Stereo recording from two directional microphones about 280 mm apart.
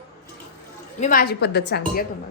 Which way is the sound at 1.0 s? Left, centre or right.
Left.